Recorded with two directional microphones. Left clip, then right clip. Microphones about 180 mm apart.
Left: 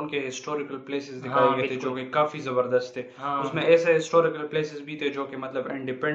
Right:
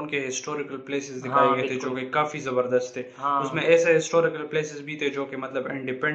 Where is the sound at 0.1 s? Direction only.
20° right (ahead or behind).